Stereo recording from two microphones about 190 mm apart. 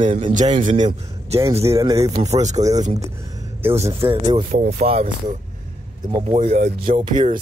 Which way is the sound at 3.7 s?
30° right (ahead or behind).